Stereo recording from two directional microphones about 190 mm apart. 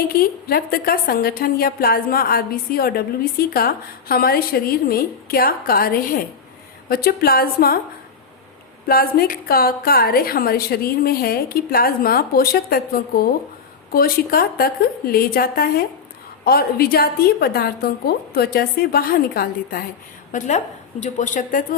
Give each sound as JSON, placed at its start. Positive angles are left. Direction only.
{"t": 0.0, "sound": "a woman's voice", "side_deg": 50}
{"t": 8.9, "sound": "a woman's voice", "side_deg": 50}